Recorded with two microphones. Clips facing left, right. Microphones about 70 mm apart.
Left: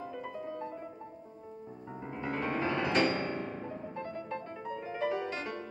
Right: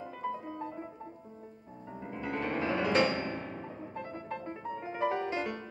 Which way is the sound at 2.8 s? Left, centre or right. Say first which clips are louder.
Right 2 dB; right.